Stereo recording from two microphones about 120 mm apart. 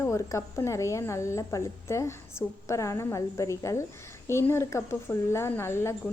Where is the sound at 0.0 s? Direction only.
25° left (ahead or behind).